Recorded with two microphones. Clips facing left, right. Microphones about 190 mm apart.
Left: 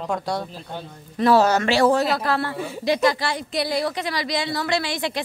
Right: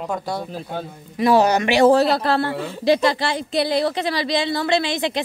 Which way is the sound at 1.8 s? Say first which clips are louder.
Right 4 dB; 30° right (ahead or behind).